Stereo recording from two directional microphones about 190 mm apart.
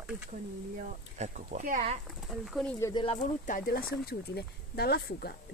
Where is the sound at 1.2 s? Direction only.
40° right (ahead or behind).